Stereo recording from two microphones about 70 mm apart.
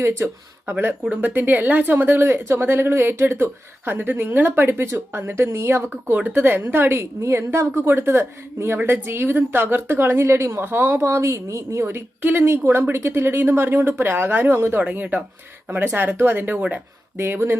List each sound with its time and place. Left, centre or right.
0.2 s a woman's voice: right
6.1 s a woman's voice: right
14.8 s speech: right
17.2 s a woman's voice: right